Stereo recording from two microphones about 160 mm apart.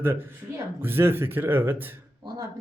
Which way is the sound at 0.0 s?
15° right (ahead or behind).